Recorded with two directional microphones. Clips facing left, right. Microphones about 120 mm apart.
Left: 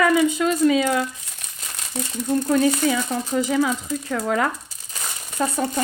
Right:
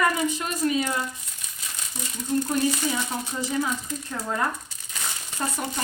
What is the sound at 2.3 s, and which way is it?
Speech, 80° left.